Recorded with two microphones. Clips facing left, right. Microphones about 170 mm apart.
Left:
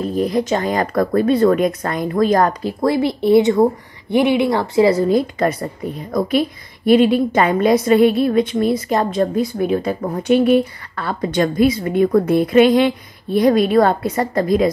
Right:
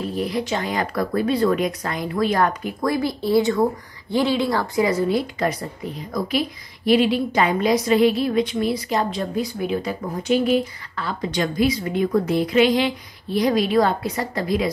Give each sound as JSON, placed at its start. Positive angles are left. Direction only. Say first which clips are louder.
{"t": 0.0, "sound": "speech", "louder": "left 6 dB", "side_deg": 40}
{"t": 4.8, "sound": "speech", "louder": "left 6 dB", "side_deg": 35}
{"t": 6.9, "sound": "speech", "louder": "left 5 dB", "side_deg": 50}